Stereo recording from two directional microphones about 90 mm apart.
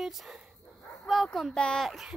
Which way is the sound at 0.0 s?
5° right (ahead or behind).